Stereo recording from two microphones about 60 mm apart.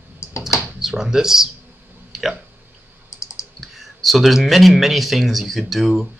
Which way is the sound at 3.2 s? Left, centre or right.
Left.